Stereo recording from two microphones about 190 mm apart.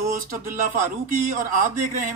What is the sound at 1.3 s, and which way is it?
Speech, 45° right (ahead or behind).